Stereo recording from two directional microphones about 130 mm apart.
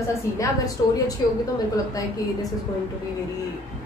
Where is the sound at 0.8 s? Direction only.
30° left (ahead or behind).